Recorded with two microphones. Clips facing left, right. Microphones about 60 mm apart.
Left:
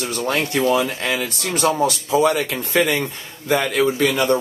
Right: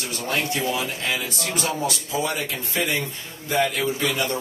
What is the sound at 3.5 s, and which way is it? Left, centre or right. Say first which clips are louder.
Speech: left 4 dB; left.